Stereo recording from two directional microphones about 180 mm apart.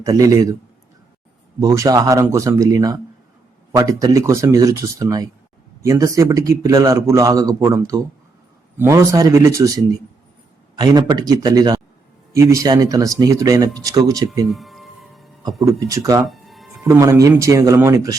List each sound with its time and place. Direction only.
0.0 s a man's voice: 20° right (ahead or behind)
1.5 s a man's voice: 15° right (ahead or behind)
14.5 s music: centre (ahead or behind)
15.6 s speech: 15° right (ahead or behind)
16.3 s music: centre (ahead or behind)
16.8 s speech: 15° right (ahead or behind)